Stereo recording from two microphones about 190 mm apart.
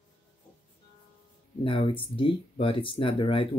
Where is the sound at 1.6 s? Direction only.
25° left (ahead or behind).